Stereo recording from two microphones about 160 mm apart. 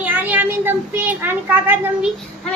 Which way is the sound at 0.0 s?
10° right (ahead or behind).